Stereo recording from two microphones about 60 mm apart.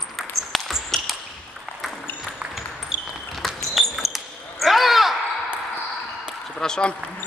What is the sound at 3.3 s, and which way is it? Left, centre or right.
Basketball bounce, centre.